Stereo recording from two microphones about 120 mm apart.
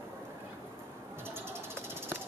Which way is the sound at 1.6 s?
20° right (ahead or behind).